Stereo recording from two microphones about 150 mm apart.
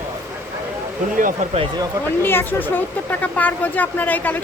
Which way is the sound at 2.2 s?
15° left (ahead or behind).